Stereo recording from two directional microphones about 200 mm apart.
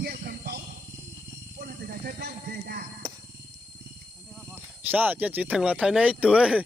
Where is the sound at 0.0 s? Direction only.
50° right (ahead or behind).